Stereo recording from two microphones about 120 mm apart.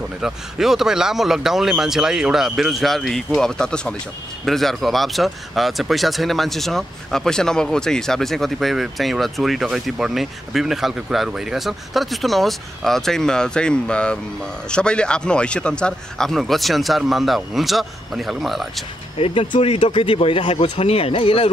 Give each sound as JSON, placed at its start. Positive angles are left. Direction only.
{"t": 0.2, "sound": "speech", "side_deg": -5}
{"t": 19.1, "sound": "speech", "side_deg": 50}
{"t": 20.8, "sound": "speech", "side_deg": 55}